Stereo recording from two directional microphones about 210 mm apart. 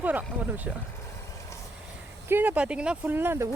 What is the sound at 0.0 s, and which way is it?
Speech, 10° right (ahead or behind).